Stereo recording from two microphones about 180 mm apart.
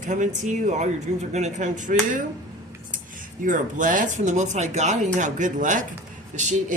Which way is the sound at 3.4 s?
45° right (ahead or behind).